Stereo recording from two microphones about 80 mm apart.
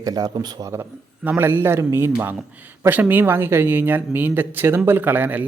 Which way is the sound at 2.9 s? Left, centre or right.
Right.